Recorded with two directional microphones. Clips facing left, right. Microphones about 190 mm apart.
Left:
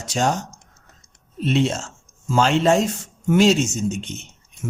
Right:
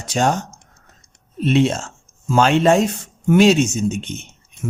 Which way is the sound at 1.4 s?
60° right (ahead or behind).